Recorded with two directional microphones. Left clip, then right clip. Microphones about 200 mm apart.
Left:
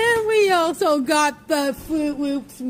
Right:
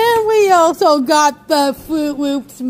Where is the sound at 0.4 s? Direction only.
10° right (ahead or behind).